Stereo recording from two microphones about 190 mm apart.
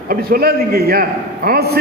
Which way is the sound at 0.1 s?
55° right (ahead or behind).